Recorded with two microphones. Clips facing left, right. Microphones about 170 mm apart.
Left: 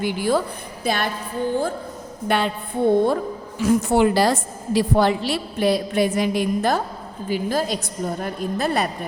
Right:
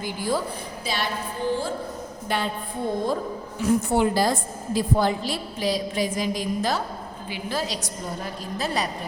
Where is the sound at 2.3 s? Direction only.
70° left (ahead or behind).